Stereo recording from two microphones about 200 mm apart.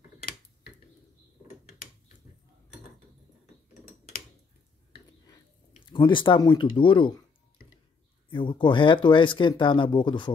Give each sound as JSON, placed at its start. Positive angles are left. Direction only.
{"t": 4.9, "sound": "a sound", "side_deg": 20}
{"t": 5.9, "sound": "speech", "side_deg": 25}
{"t": 8.3, "sound": "speech", "side_deg": 25}